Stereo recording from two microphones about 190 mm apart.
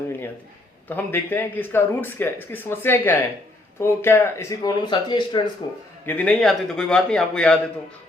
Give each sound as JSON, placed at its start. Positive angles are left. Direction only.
{"t": 0.9, "sound": "speech", "side_deg": 10}
{"t": 6.1, "sound": "a man's voice", "side_deg": 10}